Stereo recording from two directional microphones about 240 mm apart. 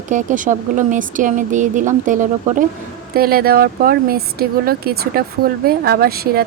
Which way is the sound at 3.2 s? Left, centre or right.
Right.